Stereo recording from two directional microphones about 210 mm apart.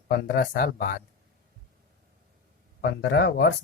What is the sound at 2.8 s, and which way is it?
Speech, 50° left (ahead or behind).